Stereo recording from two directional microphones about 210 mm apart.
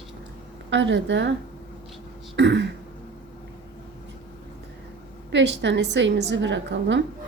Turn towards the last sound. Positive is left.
turn(degrees=-60)  # may be behind; listen again after turning